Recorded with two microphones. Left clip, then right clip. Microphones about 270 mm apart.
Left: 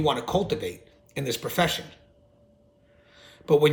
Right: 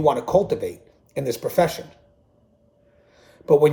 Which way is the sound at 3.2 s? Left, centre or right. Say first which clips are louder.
Left 2 dB; left.